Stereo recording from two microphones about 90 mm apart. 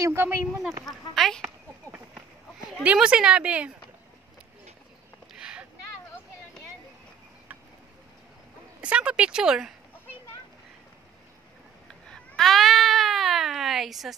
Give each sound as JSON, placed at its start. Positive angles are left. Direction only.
{"t": 0.0, "sound": "speech", "side_deg": -25}
{"t": 0.8, "sound": "speech", "side_deg": 0}
{"t": 1.4, "sound": "a sound", "side_deg": -20}
{"t": 2.8, "sound": "speech", "side_deg": -15}
{"t": 5.3, "sound": "boat", "side_deg": -10}
{"t": 8.8, "sound": "speech", "side_deg": -15}
{"t": 12.1, "sound": "a sound", "side_deg": 5}